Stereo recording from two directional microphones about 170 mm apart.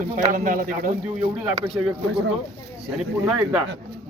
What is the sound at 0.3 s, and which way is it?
Speech, 55° right (ahead or behind).